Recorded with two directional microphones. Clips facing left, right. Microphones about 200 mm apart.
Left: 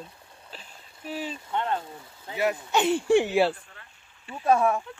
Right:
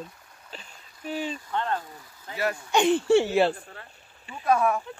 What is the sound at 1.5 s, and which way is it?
Speech, 20° left (ahead or behind).